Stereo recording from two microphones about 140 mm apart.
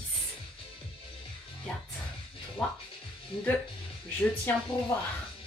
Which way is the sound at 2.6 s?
Centre (ahead or behind).